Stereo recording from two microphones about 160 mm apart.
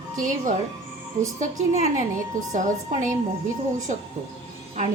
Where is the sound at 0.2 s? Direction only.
55° right (ahead or behind).